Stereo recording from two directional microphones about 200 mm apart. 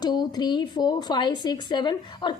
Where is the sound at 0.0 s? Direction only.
20° left (ahead or behind).